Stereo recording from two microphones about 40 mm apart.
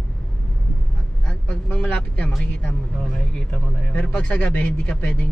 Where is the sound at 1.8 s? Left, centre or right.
Left.